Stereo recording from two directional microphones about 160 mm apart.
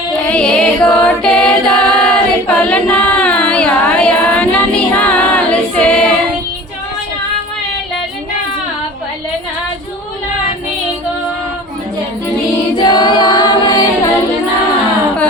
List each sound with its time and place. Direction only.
0.3 s a capella: 5° left (ahead or behind)
12.9 s music: 25° left (ahead or behind)